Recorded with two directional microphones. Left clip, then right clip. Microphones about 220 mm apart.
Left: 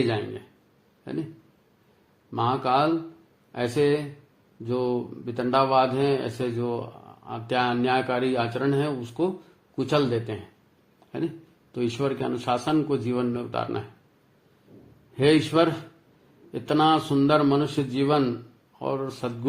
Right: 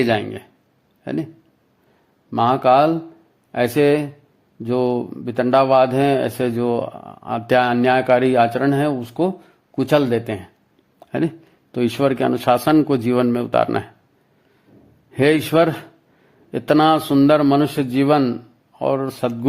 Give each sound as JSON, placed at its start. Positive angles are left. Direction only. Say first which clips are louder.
{"t": 1.1, "sound": "a man's voice", "louder": "right 8 dB", "side_deg": -45}
{"t": 2.3, "sound": "a man's voice", "louder": "right 9 dB", "side_deg": -45}
{"t": 11.0, "sound": "a sound", "louder": "right 9 dB", "side_deg": -45}
{"t": 11.7, "sound": "a man's voice", "louder": "right 8 dB", "side_deg": -40}
{"t": 15.1, "sound": "a man's voice", "louder": "right 5 dB", "side_deg": -45}